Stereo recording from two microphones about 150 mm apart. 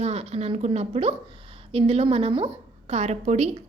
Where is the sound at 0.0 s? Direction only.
45° right (ahead or behind).